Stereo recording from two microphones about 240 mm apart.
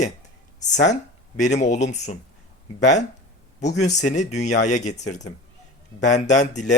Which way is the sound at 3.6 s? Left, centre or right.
Left.